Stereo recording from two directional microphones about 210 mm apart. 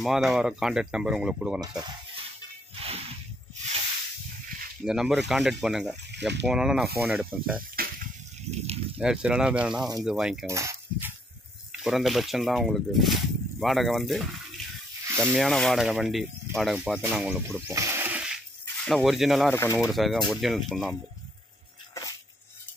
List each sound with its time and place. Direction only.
0.0 s speech: centre (ahead or behind)
2.7 s music: 30° right (ahead or behind)
4.8 s speech: 5° right (ahead or behind)
6.1 s speech: 55° right (ahead or behind)
6.4 s speech: 5° right (ahead or behind)
7.5 s frying: 45° right (ahead or behind)
8.5 s a sound: 30° right (ahead or behind)
8.9 s speech: 5° right (ahead or behind)
10.4 s a sound: 15° right (ahead or behind)
11.7 s speech: centre (ahead or behind)
17.6 s a sound: 15° right (ahead or behind)
18.9 s speech: centre (ahead or behind)
19.5 s speech: 10° left (ahead or behind)
19.8 s speech: centre (ahead or behind)